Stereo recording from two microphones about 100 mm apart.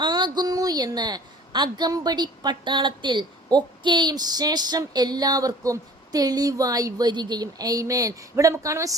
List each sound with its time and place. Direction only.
0.0 s a woman's voice: 45° right (ahead or behind)